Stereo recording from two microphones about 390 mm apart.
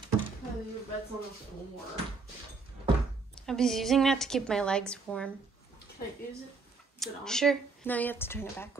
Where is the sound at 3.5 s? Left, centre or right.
Centre.